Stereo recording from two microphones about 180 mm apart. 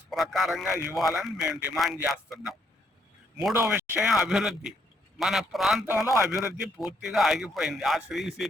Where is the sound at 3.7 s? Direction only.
10° right (ahead or behind).